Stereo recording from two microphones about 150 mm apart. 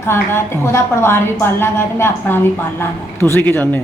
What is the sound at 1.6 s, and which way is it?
A woman's voice, 15° left (ahead or behind).